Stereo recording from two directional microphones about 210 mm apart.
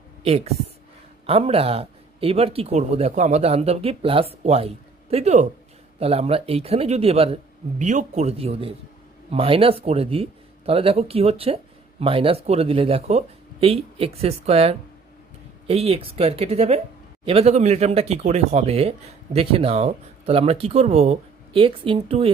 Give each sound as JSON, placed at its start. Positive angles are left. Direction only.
{"t": 0.2, "sound": "speech", "side_deg": -30}